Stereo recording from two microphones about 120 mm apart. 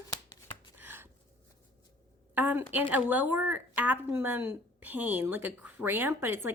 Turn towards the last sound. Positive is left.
turn(degrees=-20)  # may be behind; listen again after turning